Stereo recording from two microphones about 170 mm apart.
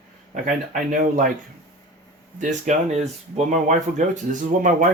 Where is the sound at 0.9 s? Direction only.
50° right (ahead or behind).